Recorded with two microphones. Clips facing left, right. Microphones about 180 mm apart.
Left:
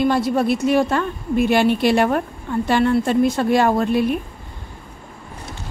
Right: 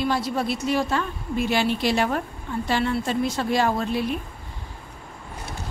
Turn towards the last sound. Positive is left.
turn(degrees=55)  # may be behind; listen again after turning